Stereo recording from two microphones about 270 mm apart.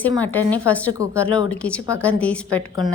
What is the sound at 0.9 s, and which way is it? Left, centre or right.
Speech, centre.